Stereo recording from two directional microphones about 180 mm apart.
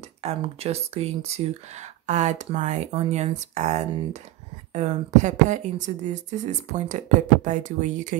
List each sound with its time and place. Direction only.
0.2 s speech: 35° right (ahead or behind)